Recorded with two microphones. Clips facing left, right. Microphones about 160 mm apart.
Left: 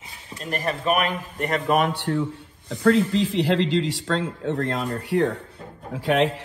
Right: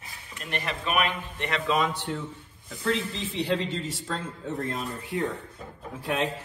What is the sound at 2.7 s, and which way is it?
Speech, 85° left.